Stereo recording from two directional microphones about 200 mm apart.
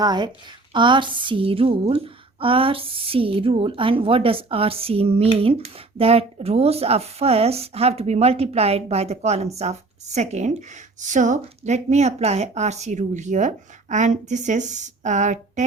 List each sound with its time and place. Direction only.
0.0 s a woman's voice: 20° right (ahead or behind); by 15.6 s 35° right (ahead or behind)